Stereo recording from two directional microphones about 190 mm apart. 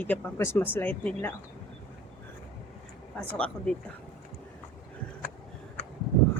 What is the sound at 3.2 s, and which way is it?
Speech, 5° left (ahead or behind).